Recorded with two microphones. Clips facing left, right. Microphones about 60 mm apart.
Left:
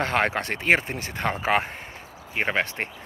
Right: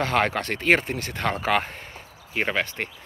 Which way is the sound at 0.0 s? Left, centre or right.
Left.